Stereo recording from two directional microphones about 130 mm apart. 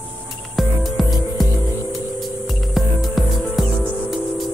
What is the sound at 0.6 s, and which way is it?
Music, centre (ahead or behind).